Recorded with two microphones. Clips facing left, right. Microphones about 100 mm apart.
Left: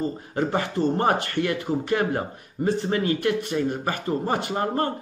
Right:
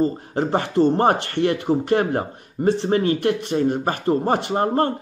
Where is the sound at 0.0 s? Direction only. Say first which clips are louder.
Right 5 dB; 30° right (ahead or behind).